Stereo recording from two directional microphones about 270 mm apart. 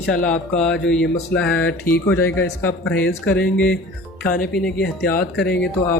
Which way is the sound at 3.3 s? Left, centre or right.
Centre.